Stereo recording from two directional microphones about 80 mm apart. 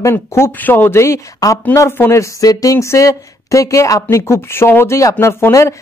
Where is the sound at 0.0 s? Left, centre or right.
Left.